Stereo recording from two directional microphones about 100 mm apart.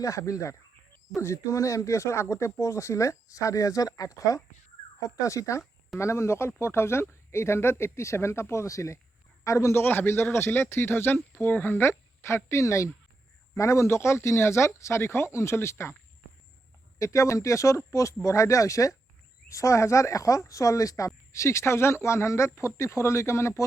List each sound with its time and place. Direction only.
0.0 s a man's voice: 35° left (ahead or behind)
17.0 s a man's voice: 30° left (ahead or behind)